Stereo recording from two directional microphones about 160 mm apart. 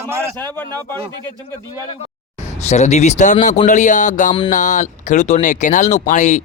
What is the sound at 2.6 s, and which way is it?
Speech, 45° left (ahead or behind).